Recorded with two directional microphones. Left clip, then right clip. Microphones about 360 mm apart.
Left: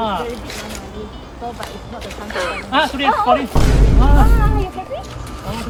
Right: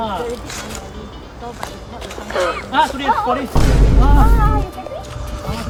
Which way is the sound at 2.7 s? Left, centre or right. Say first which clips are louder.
Left 1 dB; centre.